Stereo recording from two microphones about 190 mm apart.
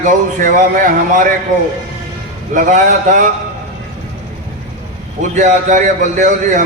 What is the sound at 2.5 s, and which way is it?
Speech, 40° right (ahead or behind).